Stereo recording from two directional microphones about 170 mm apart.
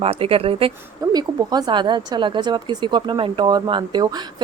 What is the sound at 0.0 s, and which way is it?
Speech, 35° right (ahead or behind).